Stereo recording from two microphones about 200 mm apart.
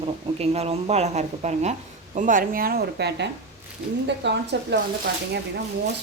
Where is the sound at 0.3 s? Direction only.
30° right (ahead or behind); by 4.8 s 60° right (ahead or behind).